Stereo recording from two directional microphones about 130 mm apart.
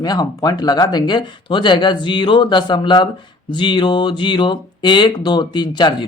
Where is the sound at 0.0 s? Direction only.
30° left (ahead or behind).